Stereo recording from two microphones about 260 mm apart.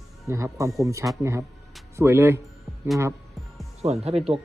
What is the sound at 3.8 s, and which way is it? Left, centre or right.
Speech, right.